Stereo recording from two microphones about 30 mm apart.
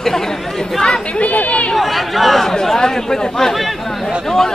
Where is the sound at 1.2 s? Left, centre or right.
Left.